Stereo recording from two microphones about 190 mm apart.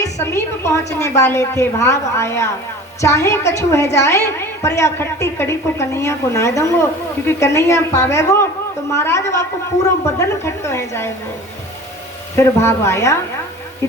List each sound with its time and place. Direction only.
0.0 s a woman's voice: 15° left (ahead or behind)
12.4 s a woman's voice: 15° left (ahead or behind)